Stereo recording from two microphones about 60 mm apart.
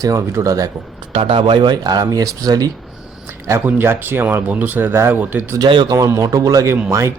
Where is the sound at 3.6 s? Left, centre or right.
Right.